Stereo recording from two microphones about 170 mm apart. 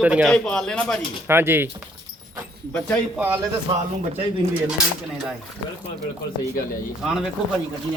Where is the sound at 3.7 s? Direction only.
30° right (ahead or behind).